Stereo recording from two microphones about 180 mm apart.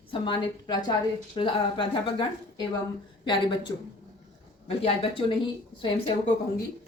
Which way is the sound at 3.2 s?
25° left (ahead or behind).